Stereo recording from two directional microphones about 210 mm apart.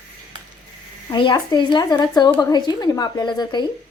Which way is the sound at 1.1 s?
20° left (ahead or behind).